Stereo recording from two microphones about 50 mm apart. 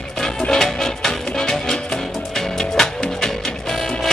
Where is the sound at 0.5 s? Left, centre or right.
Centre.